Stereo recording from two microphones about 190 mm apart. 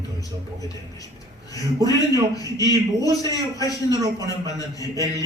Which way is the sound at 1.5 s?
20° left (ahead or behind).